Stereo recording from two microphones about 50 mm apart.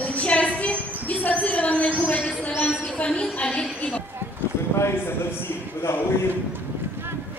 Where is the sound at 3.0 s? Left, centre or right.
Left.